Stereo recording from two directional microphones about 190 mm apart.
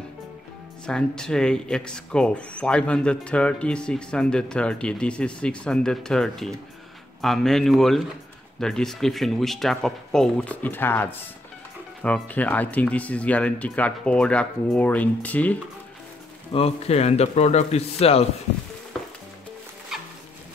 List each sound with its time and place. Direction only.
0.8 s speech: 5° left (ahead or behind)
16.5 s a man's voice: 30° left (ahead or behind)